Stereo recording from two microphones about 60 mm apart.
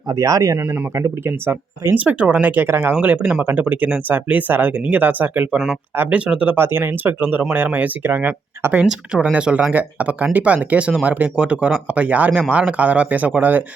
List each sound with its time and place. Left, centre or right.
0.1 s speech: right
0.9 s speech: right
2.0 s speech: right
2.6 s speech: right
2.9 s speech: right
6.6 s speech: right
9.3 s speech: centre